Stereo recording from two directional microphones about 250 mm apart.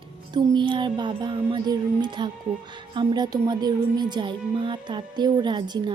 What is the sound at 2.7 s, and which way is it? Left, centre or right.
A woman's voice, centre.